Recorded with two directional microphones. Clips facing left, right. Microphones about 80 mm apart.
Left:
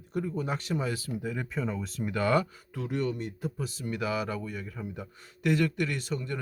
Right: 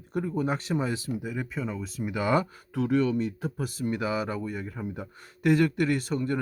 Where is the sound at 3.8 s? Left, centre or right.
Right.